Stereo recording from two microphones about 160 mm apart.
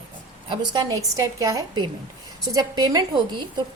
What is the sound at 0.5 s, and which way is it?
A woman's voice, 25° right (ahead or behind).